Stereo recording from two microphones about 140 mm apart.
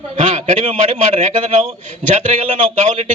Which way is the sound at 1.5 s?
55° right (ahead or behind).